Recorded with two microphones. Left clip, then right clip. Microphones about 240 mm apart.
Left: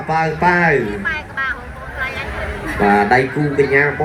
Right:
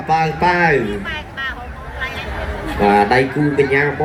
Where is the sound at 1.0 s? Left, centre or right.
Centre.